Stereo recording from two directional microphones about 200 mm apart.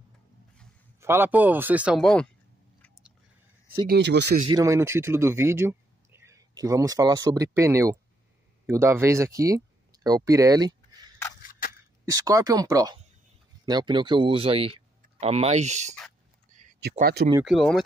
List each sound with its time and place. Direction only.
1.0 s a man's voice: 10° right (ahead or behind)
3.8 s speech: 55° right (ahead or behind)
4.5 s a man's voice: 15° right (ahead or behind); by 15.9 s 35° right (ahead or behind)
17.0 s speech: 55° right (ahead or behind)
17.5 s speech: centre (ahead or behind)